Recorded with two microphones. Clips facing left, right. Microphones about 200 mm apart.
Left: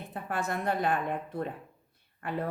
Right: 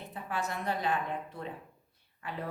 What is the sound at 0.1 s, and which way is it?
Speech, 50° left (ahead or behind).